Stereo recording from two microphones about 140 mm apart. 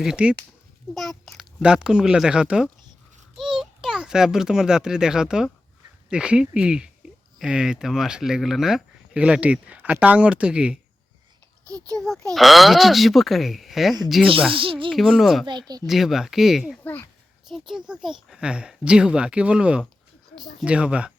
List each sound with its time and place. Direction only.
0.0 s a child's voice: 5° right (ahead or behind)
11.6 s a child's voice: 25° right (ahead or behind)
11.9 s a child's voice: 5° left (ahead or behind)
14.5 s speech: 40° right (ahead or behind)
14.8 s a child's voice: centre (ahead or behind)
15.4 s speech: 30° right (ahead or behind)
15.9 s a child's voice: centre (ahead or behind)
16.8 s speech: 15° left (ahead or behind)
17.5 s speech: 5° right (ahead or behind)